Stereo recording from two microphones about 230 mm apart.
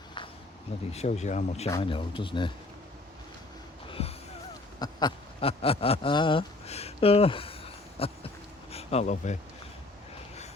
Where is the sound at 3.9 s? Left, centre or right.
Left.